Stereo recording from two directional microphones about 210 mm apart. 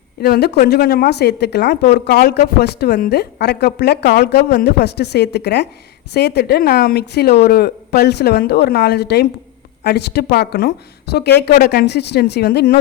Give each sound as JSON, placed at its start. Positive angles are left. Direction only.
{"t": 0.2, "sound": "a woman's voice", "side_deg": 50}